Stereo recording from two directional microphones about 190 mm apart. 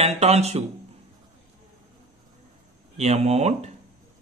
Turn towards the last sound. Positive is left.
turn(degrees=-35)  # may be behind; listen again after turning